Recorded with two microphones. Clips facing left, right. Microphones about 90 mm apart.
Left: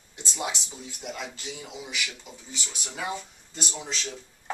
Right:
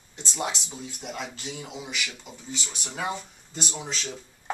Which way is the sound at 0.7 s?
Centre (ahead or behind).